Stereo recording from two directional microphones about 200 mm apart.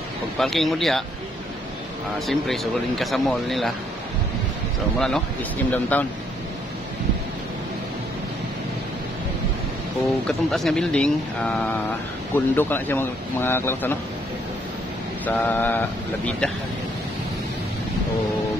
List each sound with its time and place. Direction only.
0.4 s speech: centre (ahead or behind)
2.1 s speech: centre (ahead or behind)
4.9 s speech: 5° left (ahead or behind)
10.2 s speech: centre (ahead or behind)
15.2 s speech: 10° left (ahead or behind)